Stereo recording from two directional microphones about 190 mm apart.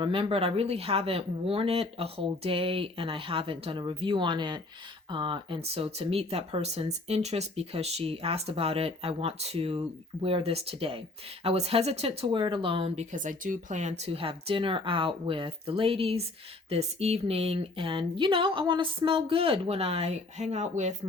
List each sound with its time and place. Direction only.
0.0 s speech: 30° right (ahead or behind)
13.1 s speech: 45° right (ahead or behind)